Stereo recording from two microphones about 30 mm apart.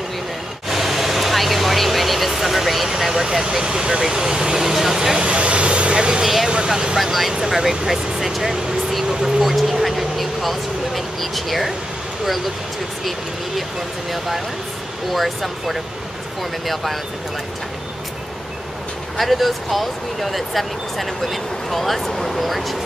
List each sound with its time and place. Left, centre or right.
0.7 s vehicle: centre
5.2 s vehicle: right
5.9 s vehicle: right
6.2 s vehicle: centre
7.4 s speech: centre
14.1 s speech: centre
19.1 s speech: centre